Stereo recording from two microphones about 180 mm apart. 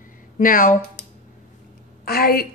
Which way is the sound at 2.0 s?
55° left (ahead or behind).